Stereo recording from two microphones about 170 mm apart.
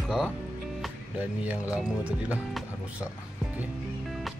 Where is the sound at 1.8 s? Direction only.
5° right (ahead or behind).